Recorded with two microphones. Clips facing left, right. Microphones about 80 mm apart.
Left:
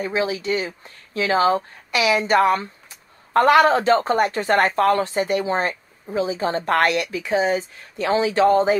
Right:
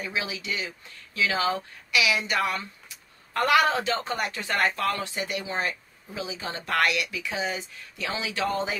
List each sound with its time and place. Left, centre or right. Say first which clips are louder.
0.0 s speech: left 9 dB; left